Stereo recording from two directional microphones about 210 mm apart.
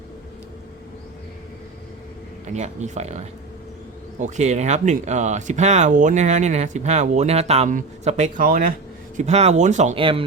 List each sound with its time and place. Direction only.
2.5 s speech: 35° right (ahead or behind)